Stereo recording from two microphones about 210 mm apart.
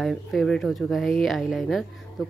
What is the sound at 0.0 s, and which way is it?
Speech, centre (ahead or behind).